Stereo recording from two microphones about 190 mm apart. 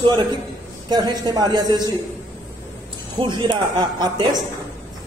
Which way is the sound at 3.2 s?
25° right (ahead or behind).